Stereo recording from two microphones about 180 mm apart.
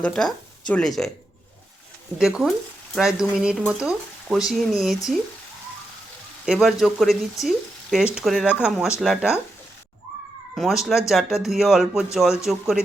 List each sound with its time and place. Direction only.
0.0 s frying: 5° left (ahead or behind)
2.1 s frying: 5° right (ahead or behind)
6.4 s frying: centre (ahead or behind)
10.5 s speech: centre (ahead or behind)
11.1 s frying: centre (ahead or behind)